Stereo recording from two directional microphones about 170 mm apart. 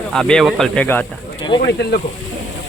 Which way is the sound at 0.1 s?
5° left (ahead or behind).